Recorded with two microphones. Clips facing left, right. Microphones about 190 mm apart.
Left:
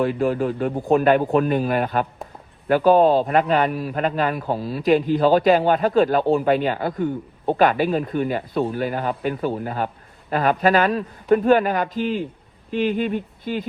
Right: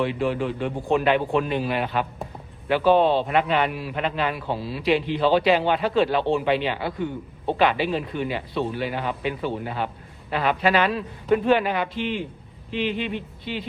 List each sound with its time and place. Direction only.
0.0 s speech: 40° left (ahead or behind)